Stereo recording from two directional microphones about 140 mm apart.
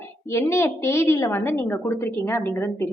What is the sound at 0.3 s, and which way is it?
A woman's voice, 20° left (ahead or behind).